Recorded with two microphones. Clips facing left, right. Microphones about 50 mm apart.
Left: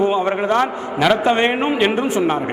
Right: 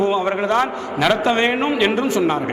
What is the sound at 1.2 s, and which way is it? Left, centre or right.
A man's voice, left.